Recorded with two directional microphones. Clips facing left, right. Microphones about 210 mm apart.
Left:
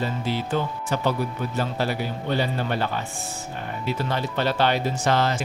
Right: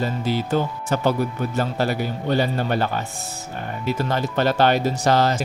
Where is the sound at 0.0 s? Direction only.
40° right (ahead or behind).